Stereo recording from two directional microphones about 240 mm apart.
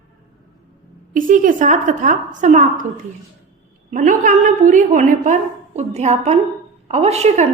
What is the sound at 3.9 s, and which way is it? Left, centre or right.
A woman's voice, right.